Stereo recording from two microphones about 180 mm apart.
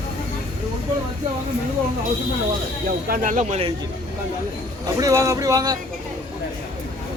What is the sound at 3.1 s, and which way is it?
Speech, 45° right (ahead or behind).